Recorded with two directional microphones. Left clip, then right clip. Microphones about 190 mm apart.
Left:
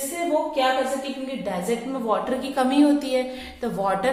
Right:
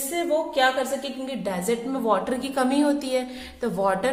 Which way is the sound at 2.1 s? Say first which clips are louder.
Even; 25° right (ahead or behind).